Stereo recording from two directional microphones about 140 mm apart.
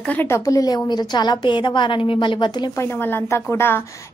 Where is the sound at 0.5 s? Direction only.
25° left (ahead or behind).